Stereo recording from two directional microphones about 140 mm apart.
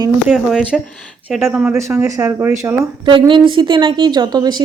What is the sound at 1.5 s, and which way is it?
Speech, 15° right (ahead or behind).